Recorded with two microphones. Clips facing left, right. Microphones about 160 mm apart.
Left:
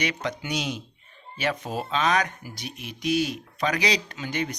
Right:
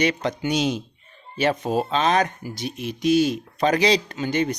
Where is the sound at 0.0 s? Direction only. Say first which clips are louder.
Right 7 dB; 30° right (ahead or behind).